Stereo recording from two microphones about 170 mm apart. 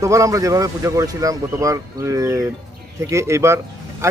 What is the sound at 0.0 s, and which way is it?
A man's voice, 20° right (ahead or behind).